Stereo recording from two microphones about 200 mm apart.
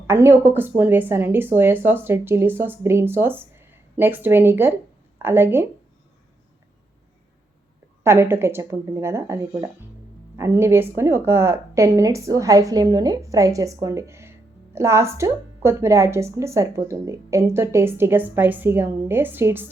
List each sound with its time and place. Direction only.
0.1 s a woman's voice: 10° right (ahead or behind)
8.0 s a woman's voice: 10° right (ahead or behind)